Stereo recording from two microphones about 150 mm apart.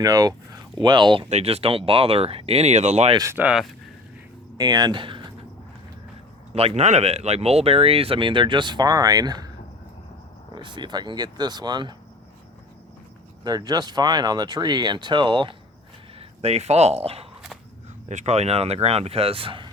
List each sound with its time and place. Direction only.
0.0 s speech: 25° right (ahead or behind)
1.3 s speech: 45° right (ahead or behind)
3.2 s speech: 20° right (ahead or behind)
3.4 s speech: 5° right (ahead or behind)
4.5 s speech: 25° right (ahead or behind)
6.5 s speech: 40° right (ahead or behind); by 9.5 s 25° right (ahead or behind)
10.5 s speech: 30° right (ahead or behind)
13.4 s speech: 25° right (ahead or behind)
16.1 s speech: 45° right (ahead or behind)